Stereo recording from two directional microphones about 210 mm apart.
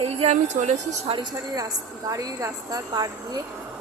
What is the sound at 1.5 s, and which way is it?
A woman's voice, 15° right (ahead or behind).